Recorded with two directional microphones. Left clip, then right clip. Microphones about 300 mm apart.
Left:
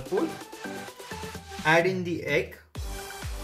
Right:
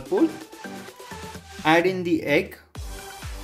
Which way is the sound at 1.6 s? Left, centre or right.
Right.